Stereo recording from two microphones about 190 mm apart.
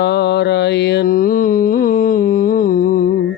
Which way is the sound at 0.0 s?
60° left (ahead or behind).